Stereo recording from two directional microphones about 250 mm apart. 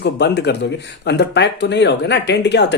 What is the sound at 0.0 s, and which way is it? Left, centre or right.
Speech, left.